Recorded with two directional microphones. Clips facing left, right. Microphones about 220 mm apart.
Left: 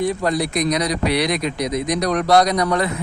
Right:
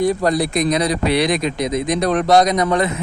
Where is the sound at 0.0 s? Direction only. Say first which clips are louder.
Right 3 dB; 40° right (ahead or behind).